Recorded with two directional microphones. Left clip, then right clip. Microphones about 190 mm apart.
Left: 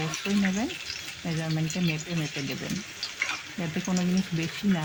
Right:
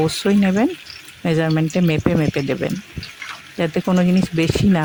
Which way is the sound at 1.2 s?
60° right (ahead or behind).